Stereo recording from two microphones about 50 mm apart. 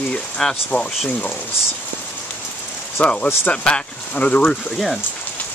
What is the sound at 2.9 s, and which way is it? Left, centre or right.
Speech, left.